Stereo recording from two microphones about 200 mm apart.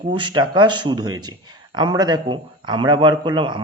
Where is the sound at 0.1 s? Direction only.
20° right (ahead or behind).